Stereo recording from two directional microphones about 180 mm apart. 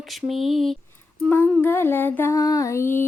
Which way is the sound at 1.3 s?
5° left (ahead or behind).